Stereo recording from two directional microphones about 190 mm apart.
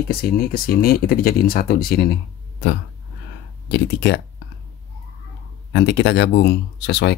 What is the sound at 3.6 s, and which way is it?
Speech, 65° left (ahead or behind).